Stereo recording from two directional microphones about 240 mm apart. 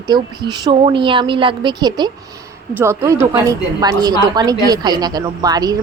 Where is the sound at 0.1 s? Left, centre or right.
Centre.